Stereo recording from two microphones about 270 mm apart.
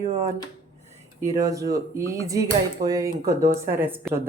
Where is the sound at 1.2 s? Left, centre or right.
Centre.